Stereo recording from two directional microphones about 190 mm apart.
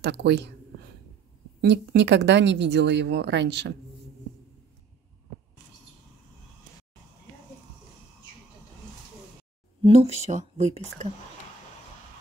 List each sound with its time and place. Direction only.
0.0 s speech: 60° right (ahead or behind)
1.6 s speech: 60° right (ahead or behind)
9.8 s speech: 35° right (ahead or behind)